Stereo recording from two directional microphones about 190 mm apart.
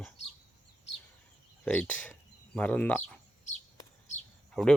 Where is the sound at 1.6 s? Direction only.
5° left (ahead or behind).